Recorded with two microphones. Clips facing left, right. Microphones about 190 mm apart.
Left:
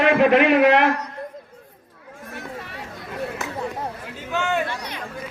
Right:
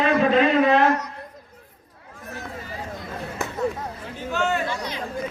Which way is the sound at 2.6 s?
70° left (ahead or behind).